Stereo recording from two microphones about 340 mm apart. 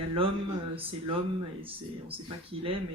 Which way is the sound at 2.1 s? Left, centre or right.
Centre.